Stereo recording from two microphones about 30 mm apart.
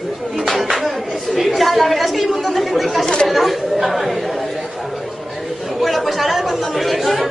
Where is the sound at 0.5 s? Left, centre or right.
Centre.